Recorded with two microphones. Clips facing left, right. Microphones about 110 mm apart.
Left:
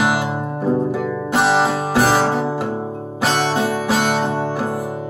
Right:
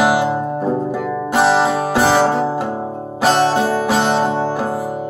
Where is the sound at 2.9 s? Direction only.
30° right (ahead or behind).